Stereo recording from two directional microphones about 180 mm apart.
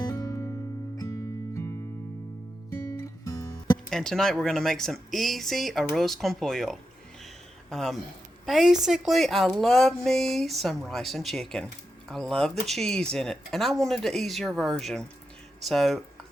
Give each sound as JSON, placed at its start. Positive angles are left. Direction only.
{"t": 0.0, "sound": "music", "side_deg": 20}
{"t": 3.0, "sound": "music", "side_deg": 20}
{"t": 3.8, "sound": "speech", "side_deg": 0}